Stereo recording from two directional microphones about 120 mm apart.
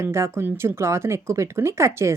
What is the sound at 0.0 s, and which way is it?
A woman's voice, 25° right (ahead or behind).